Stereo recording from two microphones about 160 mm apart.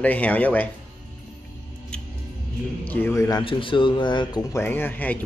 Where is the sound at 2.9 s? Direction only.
15° left (ahead or behind).